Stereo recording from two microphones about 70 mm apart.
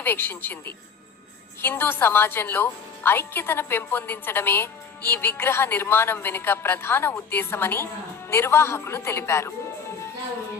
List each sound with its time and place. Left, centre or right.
0.0 s a woman's voice: left
1.6 s a woman's voice: left